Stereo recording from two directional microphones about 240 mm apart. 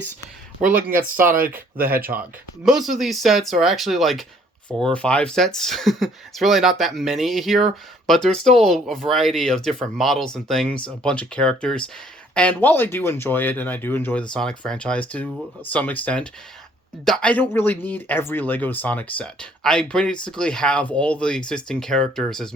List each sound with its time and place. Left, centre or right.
0.6 s speech: right
1.8 s speech: centre